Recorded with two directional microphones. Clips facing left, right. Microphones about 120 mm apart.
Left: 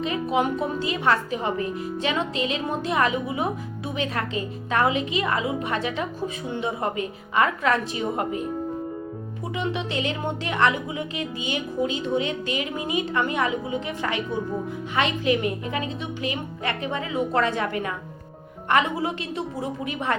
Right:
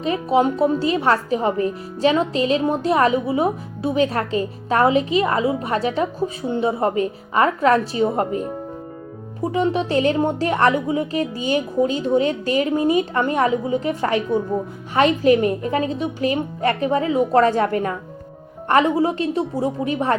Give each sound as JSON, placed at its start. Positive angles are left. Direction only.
{"t": 0.0, "sound": "speech", "side_deg": -35}